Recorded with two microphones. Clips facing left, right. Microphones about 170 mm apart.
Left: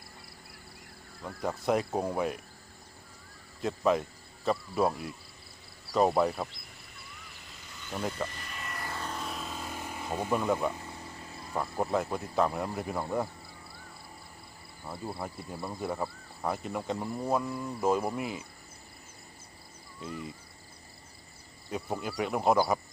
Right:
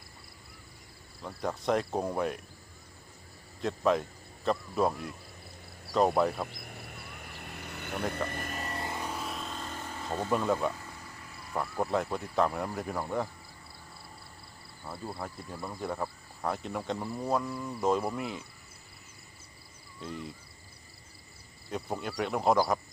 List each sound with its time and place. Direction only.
1.2 s cricket: 5° left (ahead or behind)
3.6 s cricket: centre (ahead or behind)
6.5 s a sound: 60° right (ahead or behind)
8.7 s vehicle: 20° right (ahead or behind); by 11.5 s 25° left (ahead or behind)
12.0 s speech: 10° left (ahead or behind)
14.8 s cricket: centre (ahead or behind)
20.0 s cricket: centre (ahead or behind)
21.7 s cricket: centre (ahead or behind)